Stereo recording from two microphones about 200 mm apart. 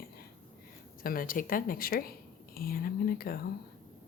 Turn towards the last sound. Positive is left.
turn(degrees=50)  # may be behind; listen again after turning